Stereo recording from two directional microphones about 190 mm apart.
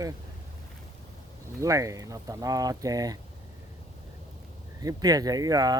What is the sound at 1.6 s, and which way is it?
Speech, 15° right (ahead or behind).